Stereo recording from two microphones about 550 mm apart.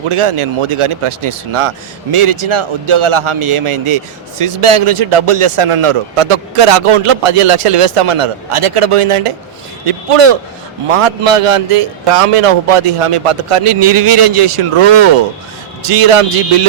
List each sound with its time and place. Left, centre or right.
0.1 s a man's voice: right